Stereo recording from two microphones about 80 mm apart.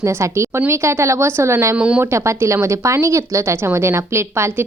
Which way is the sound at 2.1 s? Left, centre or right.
Right.